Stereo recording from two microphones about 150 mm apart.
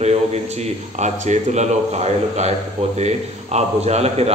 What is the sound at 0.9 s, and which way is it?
Speech, 50° right (ahead or behind).